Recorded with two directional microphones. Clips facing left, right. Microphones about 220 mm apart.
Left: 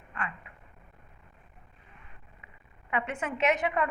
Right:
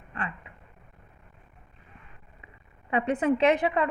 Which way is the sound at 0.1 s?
35° right (ahead or behind).